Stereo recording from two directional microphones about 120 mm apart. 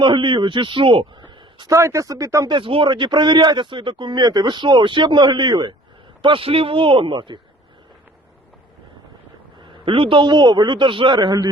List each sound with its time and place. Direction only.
0.0 s a man's voice: 40° right (ahead or behind)
1.7 s speech: 25° right (ahead or behind)
2.5 s speech: 45° right (ahead or behind)
6.2 s a man's voice: 45° right (ahead or behind)
9.6 s speech: 40° right (ahead or behind)